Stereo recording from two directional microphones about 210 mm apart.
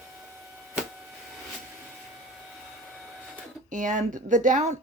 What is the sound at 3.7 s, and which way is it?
Speech, 35° right (ahead or behind).